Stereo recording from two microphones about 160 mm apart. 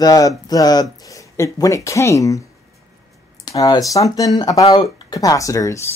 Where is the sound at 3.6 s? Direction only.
20° left (ahead or behind).